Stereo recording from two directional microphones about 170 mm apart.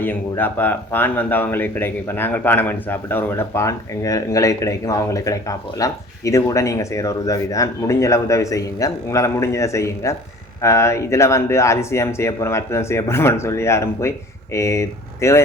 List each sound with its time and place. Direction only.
0.0 s speech: 10° left (ahead or behind)